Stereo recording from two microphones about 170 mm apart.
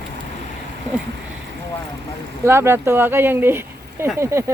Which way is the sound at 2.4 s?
15° right (ahead or behind).